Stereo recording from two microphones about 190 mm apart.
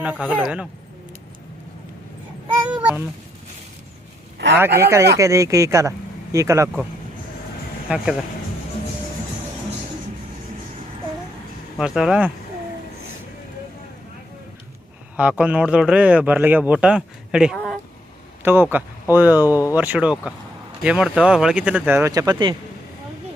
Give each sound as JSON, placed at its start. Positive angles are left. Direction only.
{"t": 0.0, "sound": "speech", "side_deg": -5}
{"t": 2.6, "sound": "cat", "side_deg": -5}
{"t": 4.8, "sound": "speech", "side_deg": -15}
{"t": 7.9, "sound": "speech", "side_deg": -5}
{"t": 11.8, "sound": "speech", "side_deg": -5}
{"t": 15.1, "sound": "speech", "side_deg": -5}
{"t": 18.4, "sound": "speech", "side_deg": -10}